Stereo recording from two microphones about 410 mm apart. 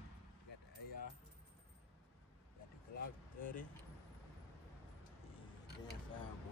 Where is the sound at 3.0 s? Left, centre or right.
Centre.